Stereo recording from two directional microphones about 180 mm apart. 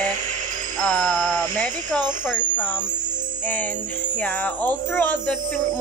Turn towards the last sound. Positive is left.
turn(degrees=10)  # may be behind; listen again after turning